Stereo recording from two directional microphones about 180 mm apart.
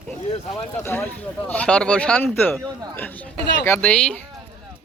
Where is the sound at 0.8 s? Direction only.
15° left (ahead or behind).